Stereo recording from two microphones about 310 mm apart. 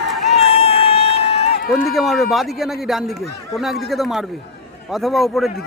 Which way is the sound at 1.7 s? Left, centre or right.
Centre.